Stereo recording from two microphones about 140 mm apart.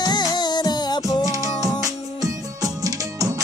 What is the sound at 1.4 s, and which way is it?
Music, 25° right (ahead or behind).